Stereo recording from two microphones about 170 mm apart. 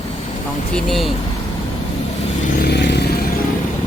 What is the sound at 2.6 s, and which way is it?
Vehicle, 75° left (ahead or behind).